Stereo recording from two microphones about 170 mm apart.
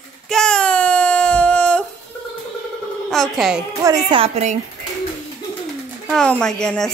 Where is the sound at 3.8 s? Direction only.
25° right (ahead or behind).